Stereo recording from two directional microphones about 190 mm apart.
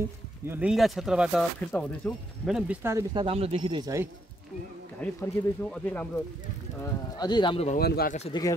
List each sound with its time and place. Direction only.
0.5 s speech: 5° right (ahead or behind)
2.8 s speech: 15° right (ahead or behind)
3.3 s speech: 30° right (ahead or behind)
5.0 s speech: 10° left (ahead or behind)
6.8 s speech: 20° left (ahead or behind)
7.7 s speech: 55° left (ahead or behind)
8.3 s speech: 20° left (ahead or behind)